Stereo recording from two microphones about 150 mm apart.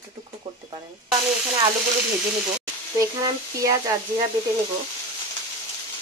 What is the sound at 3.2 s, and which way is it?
Speech, 25° right (ahead or behind).